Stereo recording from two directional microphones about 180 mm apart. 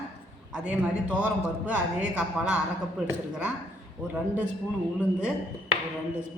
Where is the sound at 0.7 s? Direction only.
5° right (ahead or behind).